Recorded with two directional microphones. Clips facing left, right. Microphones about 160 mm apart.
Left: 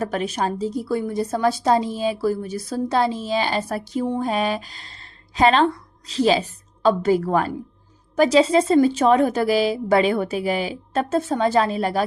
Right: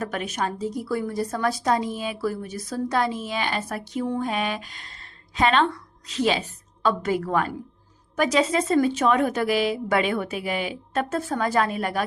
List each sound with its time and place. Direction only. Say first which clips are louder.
0.0 s a woman's voice: left 4 dB; 30° left (ahead or behind)